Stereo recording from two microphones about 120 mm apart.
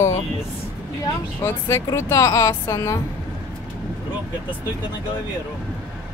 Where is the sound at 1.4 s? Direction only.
25° left (ahead or behind).